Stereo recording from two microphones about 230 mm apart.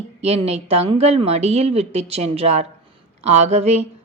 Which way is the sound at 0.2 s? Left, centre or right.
Right.